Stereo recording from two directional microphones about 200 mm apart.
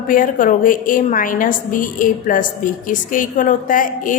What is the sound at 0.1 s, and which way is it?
A woman's voice, 40° left (ahead or behind).